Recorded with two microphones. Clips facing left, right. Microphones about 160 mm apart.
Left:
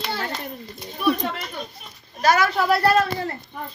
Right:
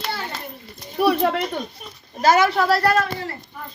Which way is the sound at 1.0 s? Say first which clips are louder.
Right 4 dB; 65° right (ahead or behind).